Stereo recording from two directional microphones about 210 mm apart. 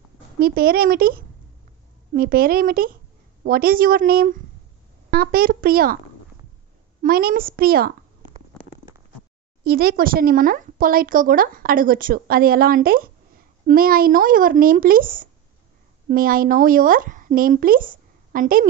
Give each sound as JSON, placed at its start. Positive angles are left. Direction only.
{"t": 0.4, "sound": "speech", "side_deg": -45}
{"t": 7.0, "sound": "speech", "side_deg": -45}
{"t": 9.7, "sound": "a woman's voice", "side_deg": -45}